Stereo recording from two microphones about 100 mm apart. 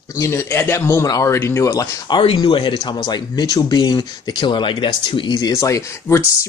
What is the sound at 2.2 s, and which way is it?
Speech, 55° left (ahead or behind).